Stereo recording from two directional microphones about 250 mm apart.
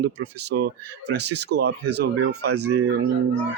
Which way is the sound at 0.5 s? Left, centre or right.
Right.